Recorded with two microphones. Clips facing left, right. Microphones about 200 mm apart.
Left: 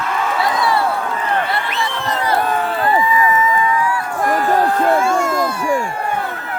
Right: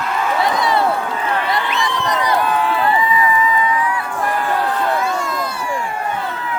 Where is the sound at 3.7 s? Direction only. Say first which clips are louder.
Left 1 dB; 20° right (ahead or behind).